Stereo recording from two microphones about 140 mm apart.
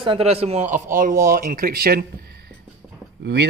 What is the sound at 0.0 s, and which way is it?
Speech, 45° right (ahead or behind).